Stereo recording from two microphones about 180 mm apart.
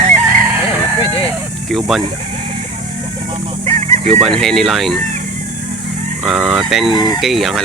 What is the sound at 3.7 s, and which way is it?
Fowl, 40° right (ahead or behind).